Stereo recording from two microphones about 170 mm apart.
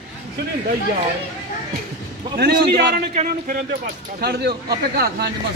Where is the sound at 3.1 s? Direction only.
45° right (ahead or behind).